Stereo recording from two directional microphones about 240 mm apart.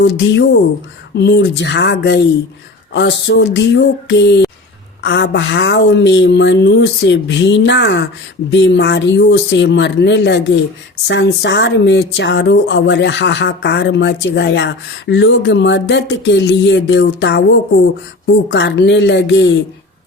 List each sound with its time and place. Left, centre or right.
0.0 s speech: left